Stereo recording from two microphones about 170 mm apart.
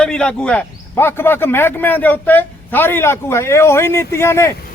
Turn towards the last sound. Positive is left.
turn(degrees=15)  # may be behind; listen again after turning